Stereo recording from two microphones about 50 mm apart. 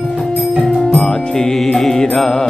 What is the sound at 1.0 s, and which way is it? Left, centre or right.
Music, centre.